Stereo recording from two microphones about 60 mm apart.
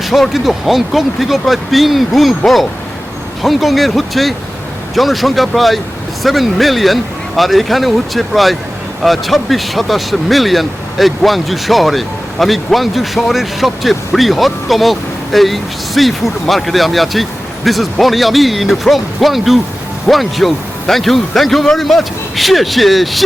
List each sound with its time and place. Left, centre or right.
0.0 s speech: centre